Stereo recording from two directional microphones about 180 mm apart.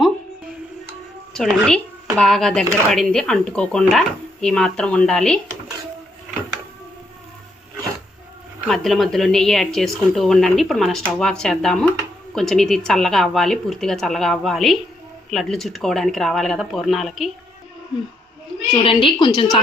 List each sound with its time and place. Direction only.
1.3 s a woman's voice: centre (ahead or behind)
8.6 s speech: centre (ahead or behind)
18.8 s a woman's voice: 30° left (ahead or behind)